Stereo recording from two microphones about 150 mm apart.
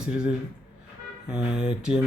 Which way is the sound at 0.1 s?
5° right (ahead or behind).